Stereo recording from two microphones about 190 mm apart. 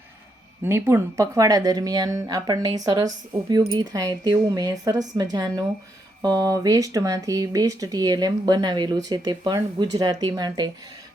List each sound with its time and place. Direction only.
0.6 s speech: 15° right (ahead or behind)